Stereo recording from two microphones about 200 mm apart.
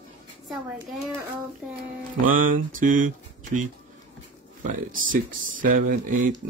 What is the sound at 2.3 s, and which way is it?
Speech, 45° right (ahead or behind).